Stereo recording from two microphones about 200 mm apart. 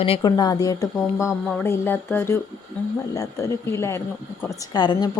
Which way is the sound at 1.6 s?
10° left (ahead or behind).